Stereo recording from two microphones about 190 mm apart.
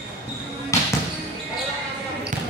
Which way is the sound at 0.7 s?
15° left (ahead or behind).